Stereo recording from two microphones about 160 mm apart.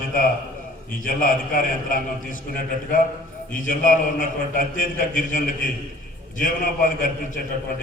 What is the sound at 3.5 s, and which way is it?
A man's voice, 55° left (ahead or behind).